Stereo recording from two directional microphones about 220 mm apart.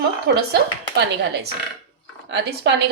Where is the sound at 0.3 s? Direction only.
50° right (ahead or behind).